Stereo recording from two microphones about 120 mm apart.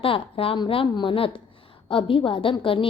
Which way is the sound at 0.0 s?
50° left (ahead or behind).